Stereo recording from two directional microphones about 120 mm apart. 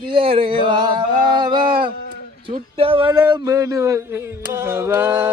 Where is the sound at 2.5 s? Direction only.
50° right (ahead or behind).